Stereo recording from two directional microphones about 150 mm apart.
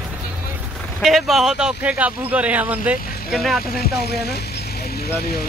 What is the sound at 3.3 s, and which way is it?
Speech, centre (ahead or behind).